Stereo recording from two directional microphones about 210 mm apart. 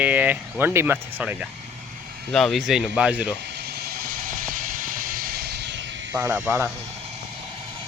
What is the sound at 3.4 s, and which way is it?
Vehicle, 50° right (ahead or behind).